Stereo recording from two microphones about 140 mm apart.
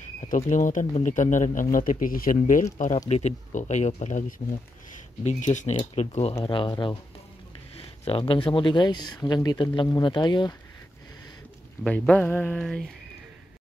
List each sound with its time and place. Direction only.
0.2 s speech: 60° left (ahead or behind); by 2.3 s 85° left
2.3 s speech: 60° left (ahead or behind)
5.9 s speech: 50° left (ahead or behind); by 7.0 s 35° left (ahead or behind)
7.7 s speech: 45° left (ahead or behind)
11.8 s a sound: 10° left (ahead or behind)